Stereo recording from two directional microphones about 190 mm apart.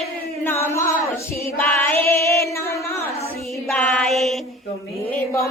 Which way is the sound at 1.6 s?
10° left (ahead or behind).